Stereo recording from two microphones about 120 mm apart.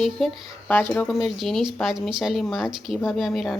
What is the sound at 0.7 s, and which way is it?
Speech, 15° left (ahead or behind).